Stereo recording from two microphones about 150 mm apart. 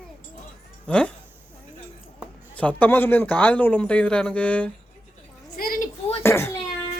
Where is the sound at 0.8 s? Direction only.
5° left (ahead or behind).